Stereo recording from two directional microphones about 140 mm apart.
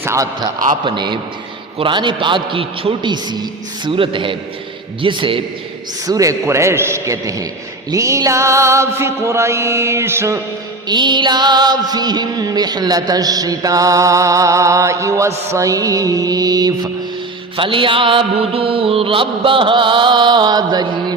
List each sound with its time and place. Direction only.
0.0 s a man's voice: 20° right (ahead or behind)
0.9 s mantra: 35° right (ahead or behind)
6.1 s music: 25° right (ahead or behind)
10.8 s music: 30° right (ahead or behind)
17.6 s mantra: 40° right (ahead or behind)